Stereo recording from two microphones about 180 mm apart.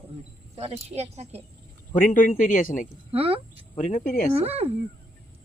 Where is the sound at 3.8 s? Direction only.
45° left (ahead or behind).